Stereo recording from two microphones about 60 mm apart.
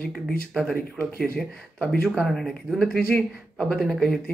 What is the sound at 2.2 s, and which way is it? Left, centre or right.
Speech, centre.